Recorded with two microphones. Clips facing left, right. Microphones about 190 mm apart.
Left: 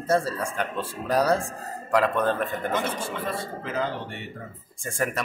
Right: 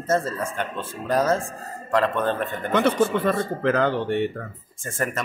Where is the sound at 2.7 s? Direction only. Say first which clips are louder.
Right 14 dB; 70° right (ahead or behind).